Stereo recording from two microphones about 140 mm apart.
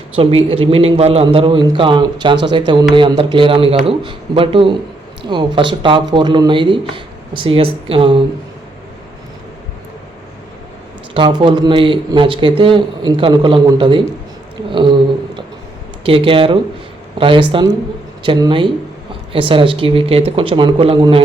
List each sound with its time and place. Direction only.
0.2 s a man's voice: 45° right (ahead or behind)
11.1 s a man's voice: 35° right (ahead or behind)
16.0 s speech: 40° right (ahead or behind)